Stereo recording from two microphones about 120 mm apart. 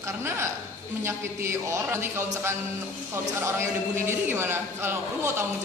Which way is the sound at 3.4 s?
20° right (ahead or behind).